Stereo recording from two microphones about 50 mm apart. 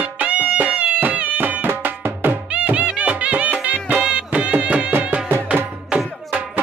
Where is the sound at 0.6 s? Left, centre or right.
Right.